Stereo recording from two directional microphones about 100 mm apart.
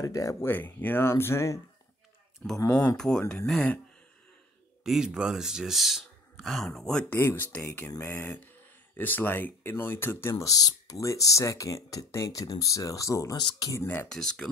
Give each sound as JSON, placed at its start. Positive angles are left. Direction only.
{"t": 0.0, "sound": "speech", "side_deg": 35}
{"t": 0.5, "sound": "speech", "side_deg": 20}
{"t": 2.4, "sound": "speech", "side_deg": 10}
{"t": 4.8, "sound": "speech", "side_deg": -5}
{"t": 7.1, "sound": "speech", "side_deg": 25}
{"t": 10.5, "sound": "speech", "side_deg": 35}
{"t": 13.4, "sound": "speech", "side_deg": 45}
{"t": 13.7, "sound": "speech", "side_deg": 20}
{"t": 14.0, "sound": "speech", "side_deg": 5}